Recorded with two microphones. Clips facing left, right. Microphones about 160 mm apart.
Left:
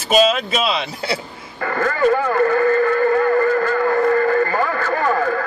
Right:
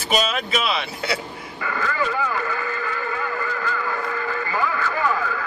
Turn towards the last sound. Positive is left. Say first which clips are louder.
# left 5 dB
turn(degrees=50)  # may be behind; listen again after turning